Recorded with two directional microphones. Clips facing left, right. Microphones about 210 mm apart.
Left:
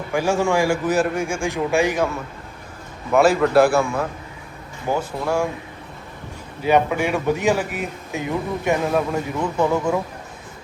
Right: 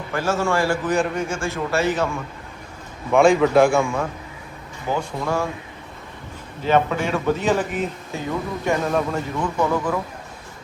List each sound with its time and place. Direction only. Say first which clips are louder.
0.1 s speech: left 2 dB; 15° left (ahead or behind)
3.1 s a man's voice: right 1 dB; 5° left (ahead or behind)
6.6 s speech: left 1 dB; 10° left (ahead or behind)